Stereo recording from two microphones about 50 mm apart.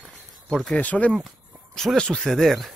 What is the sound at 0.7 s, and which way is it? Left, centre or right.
Speech, left.